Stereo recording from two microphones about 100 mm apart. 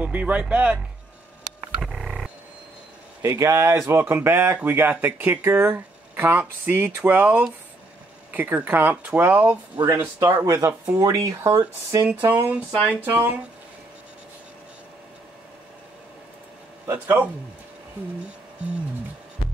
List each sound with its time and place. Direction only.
0.0 s speech: 15° right (ahead or behind)
1.8 s a sound: 5° right (ahead or behind)
3.2 s speech: 30° right (ahead or behind)
10.2 s speech: 30° right (ahead or behind)
12.3 s speech: 20° right (ahead or behind)
16.8 s speech: 20° right (ahead or behind)